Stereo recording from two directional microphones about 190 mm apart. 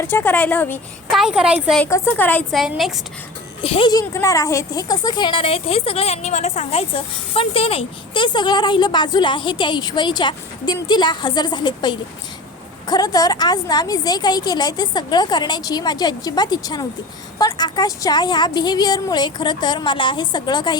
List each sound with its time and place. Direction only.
0.0 s speech: 10° left (ahead or behind)
1.1 s a woman's voice: 5° right (ahead or behind)
1.8 s a woman's voice: 10° left (ahead or behind)
3.6 s speech: 30° left (ahead or behind)